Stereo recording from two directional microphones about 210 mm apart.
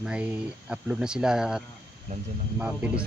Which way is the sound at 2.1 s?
30° right (ahead or behind).